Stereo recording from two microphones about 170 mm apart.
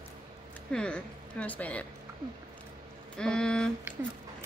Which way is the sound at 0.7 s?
5° left (ahead or behind).